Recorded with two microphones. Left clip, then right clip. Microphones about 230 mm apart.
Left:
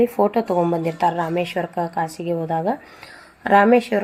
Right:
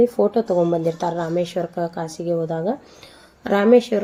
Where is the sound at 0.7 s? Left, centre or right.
Centre.